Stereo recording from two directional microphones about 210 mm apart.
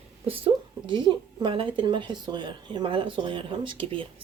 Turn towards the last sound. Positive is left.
turn(degrees=-25)  # may be behind; listen again after turning